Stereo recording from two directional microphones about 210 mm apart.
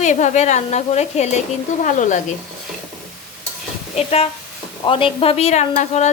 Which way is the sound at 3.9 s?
30° left (ahead or behind).